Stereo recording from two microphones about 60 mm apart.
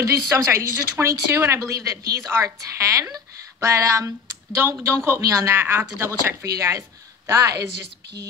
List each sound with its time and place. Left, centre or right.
0.0 s a woman's voice: right
1.0 s a woman's voice: right
1.6 s a woman's voice: right
6.4 s a woman's voice: right